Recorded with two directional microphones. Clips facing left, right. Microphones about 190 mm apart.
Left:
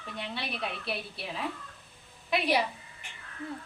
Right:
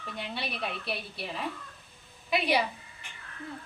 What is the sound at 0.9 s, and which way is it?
A woman's voice, centre (ahead or behind).